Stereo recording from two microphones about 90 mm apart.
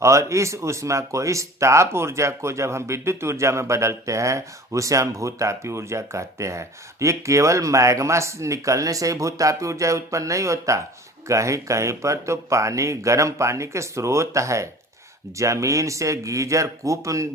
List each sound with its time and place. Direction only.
0.0 s speech: 35° right (ahead or behind)